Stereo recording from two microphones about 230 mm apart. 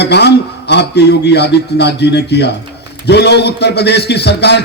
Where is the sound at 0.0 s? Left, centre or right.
Left.